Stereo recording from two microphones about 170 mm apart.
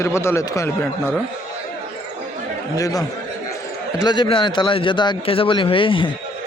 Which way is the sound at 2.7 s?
20° left (ahead or behind).